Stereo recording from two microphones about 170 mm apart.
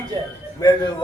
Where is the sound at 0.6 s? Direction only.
25° left (ahead or behind).